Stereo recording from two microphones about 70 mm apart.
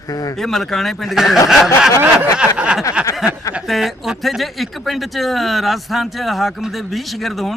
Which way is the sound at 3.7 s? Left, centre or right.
Centre.